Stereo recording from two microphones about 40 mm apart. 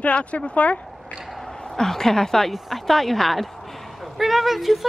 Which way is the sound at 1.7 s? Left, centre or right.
Centre.